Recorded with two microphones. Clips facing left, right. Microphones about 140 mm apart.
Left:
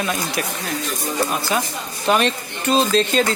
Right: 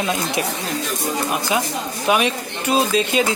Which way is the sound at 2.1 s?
10° right (ahead or behind).